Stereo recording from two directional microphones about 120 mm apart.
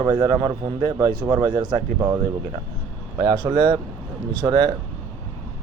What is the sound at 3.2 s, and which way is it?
A man's voice, 40° right (ahead or behind).